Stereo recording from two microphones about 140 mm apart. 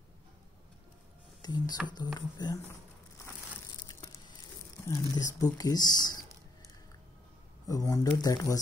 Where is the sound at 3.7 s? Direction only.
30° left (ahead or behind).